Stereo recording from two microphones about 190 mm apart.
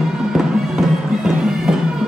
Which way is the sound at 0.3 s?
5° right (ahead or behind).